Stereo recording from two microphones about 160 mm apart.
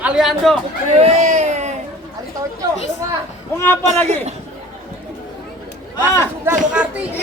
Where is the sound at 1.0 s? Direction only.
45° right (ahead or behind).